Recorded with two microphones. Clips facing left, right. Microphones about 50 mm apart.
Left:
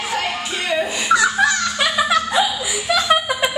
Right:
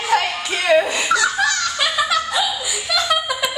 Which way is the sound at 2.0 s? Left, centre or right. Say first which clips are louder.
Left 3 dB; centre.